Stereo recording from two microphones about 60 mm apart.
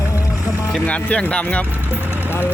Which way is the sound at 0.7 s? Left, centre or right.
Left.